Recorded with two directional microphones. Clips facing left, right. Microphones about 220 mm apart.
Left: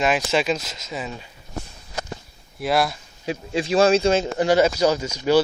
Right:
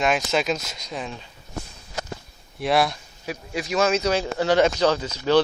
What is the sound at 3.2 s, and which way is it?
Speech, 25° left (ahead or behind).